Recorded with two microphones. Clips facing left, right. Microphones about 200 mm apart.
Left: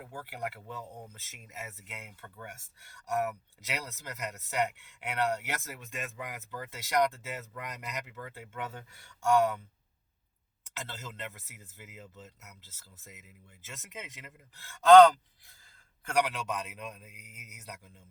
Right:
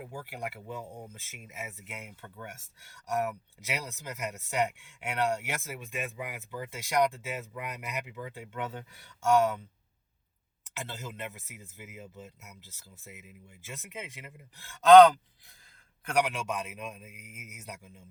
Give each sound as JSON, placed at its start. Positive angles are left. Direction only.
{"t": 0.0, "sound": "speech", "side_deg": -10}
{"t": 3.7, "sound": "speech", "side_deg": -10}
{"t": 10.8, "sound": "speech", "side_deg": -15}
{"t": 16.1, "sound": "speech", "side_deg": -10}